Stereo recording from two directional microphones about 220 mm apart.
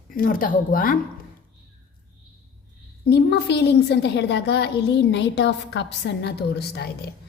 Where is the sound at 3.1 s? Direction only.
50° left (ahead or behind).